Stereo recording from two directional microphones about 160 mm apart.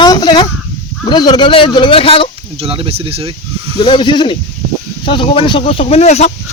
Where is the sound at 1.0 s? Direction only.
30° left (ahead or behind).